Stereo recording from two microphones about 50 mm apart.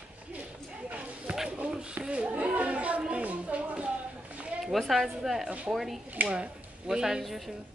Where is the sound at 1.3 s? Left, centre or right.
Right.